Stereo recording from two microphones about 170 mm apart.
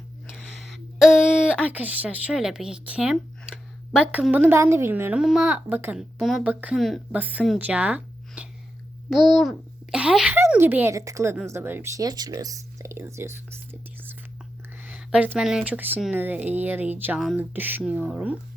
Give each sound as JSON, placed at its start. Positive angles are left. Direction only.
{"t": 0.4, "sound": "speech", "side_deg": 0}
{"t": 6.7, "sound": "a woman's voice", "side_deg": 0}
{"t": 7.2, "sound": "speech", "side_deg": -10}